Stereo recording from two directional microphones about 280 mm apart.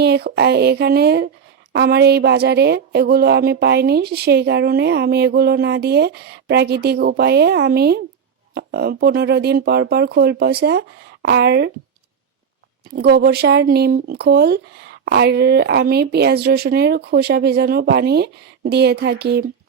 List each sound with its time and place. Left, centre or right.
0.0 s speech: right
13.0 s speech: right